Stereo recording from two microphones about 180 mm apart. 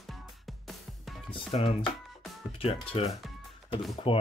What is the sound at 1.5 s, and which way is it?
Speech, 35° left (ahead or behind).